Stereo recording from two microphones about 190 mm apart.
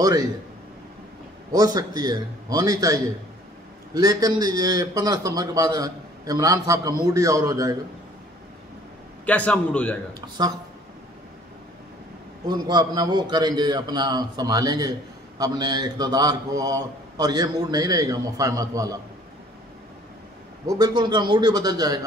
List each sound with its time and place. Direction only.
0.0 s a man's voice: 20° right (ahead or behind)
1.5 s a man's voice: 20° right (ahead or behind)
9.2 s a man's voice: 10° left (ahead or behind)
12.4 s a man's voice: 20° right (ahead or behind)
20.6 s a man's voice: 20° right (ahead or behind)